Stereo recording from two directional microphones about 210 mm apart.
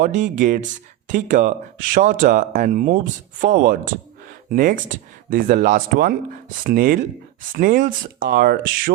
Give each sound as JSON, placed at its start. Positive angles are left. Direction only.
{"t": 0.0, "sound": "speech", "side_deg": -35}